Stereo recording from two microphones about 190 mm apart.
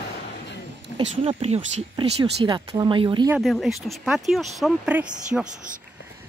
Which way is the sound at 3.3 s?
Centre (ahead or behind).